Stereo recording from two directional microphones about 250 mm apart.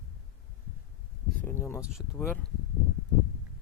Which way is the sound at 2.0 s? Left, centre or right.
Centre.